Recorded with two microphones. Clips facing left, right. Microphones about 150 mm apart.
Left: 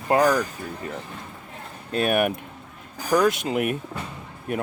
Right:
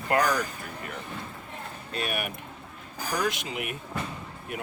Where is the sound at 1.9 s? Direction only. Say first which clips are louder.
Left 11 dB; 50° left (ahead or behind).